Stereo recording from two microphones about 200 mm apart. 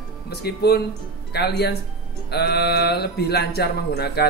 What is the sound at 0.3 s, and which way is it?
Speech, 55° left (ahead or behind).